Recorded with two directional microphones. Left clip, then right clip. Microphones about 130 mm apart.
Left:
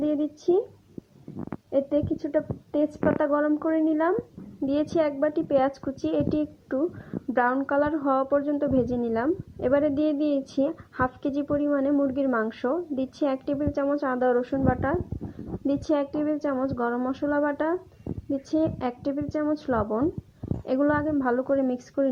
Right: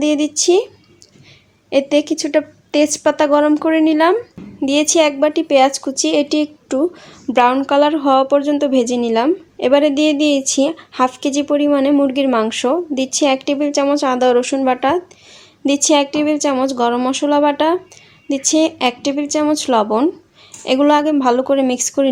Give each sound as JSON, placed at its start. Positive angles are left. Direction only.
{"t": 0.0, "sound": "speech", "side_deg": -15}
{"t": 1.7, "sound": "a woman's voice", "side_deg": -20}
{"t": 3.8, "sound": "a woman's voice", "side_deg": -20}